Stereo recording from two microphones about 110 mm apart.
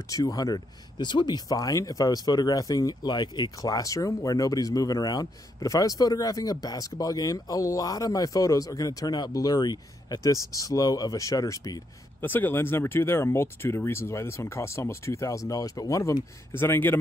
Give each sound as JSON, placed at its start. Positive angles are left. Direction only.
{"t": 0.1, "sound": "speech", "side_deg": 30}
{"t": 12.2, "sound": "speech", "side_deg": 20}